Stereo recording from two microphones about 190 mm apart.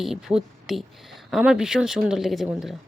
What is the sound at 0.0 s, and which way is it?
Speech, centre (ahead or behind).